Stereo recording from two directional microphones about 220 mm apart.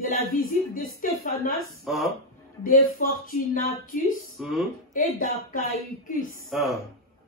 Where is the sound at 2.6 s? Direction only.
40° left (ahead or behind).